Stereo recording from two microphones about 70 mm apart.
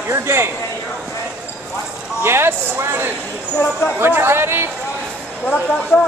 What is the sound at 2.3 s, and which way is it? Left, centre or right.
A man's voice, right.